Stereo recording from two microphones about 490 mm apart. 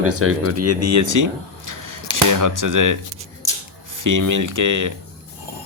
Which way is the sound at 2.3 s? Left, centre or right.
Right.